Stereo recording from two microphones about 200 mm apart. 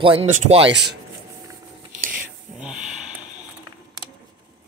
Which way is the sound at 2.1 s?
5° right (ahead or behind).